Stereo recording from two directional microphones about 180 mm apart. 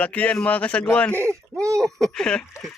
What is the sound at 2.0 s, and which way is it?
Speech, 5° left (ahead or behind).